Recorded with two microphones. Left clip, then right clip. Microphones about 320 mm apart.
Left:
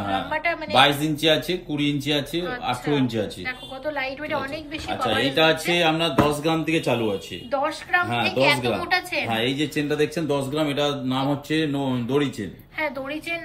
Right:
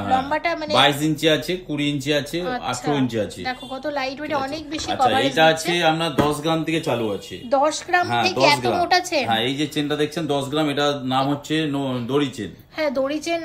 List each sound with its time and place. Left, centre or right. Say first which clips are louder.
0.3 s speech: right 2 dB; centre
10.3 s speech: right 2 dB; centre